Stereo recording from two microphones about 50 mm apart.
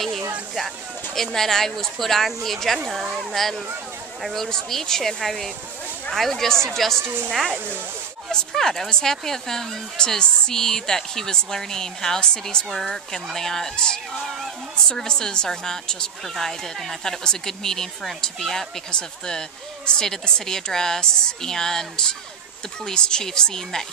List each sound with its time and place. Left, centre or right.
1.1 s a woman's voice: centre
7.0 s a woman's voice: right
7.2 s a woman's voice: centre
7.5 s speech: right
8.3 s speech: centre